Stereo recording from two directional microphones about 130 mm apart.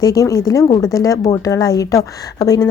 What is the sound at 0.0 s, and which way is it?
Speech, 25° left (ahead or behind).